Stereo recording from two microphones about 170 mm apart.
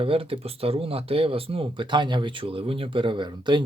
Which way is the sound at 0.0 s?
35° right (ahead or behind).